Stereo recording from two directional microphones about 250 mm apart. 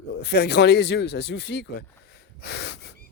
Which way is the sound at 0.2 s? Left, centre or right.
Left.